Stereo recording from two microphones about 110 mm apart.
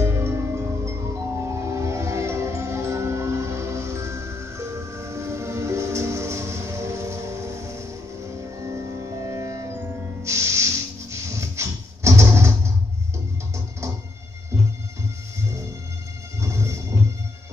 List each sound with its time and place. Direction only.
0.0 s music: 25° right (ahead or behind)
10.2 s a sound: 25° right (ahead or behind)
16.3 s music: 25° right (ahead or behind)